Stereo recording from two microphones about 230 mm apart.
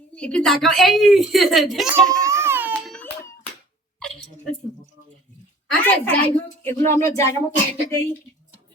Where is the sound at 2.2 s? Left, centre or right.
Centre.